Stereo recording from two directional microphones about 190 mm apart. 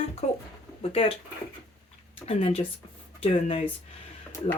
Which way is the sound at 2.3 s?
35° left (ahead or behind).